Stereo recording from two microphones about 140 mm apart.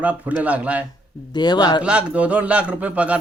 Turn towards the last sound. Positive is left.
turn(degrees=-10)  # may be behind; listen again after turning